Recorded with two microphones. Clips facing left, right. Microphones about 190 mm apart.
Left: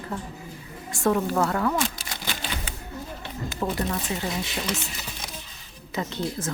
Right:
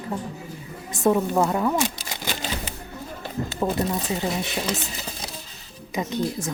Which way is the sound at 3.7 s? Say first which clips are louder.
Right 3 dB; 20° right (ahead or behind).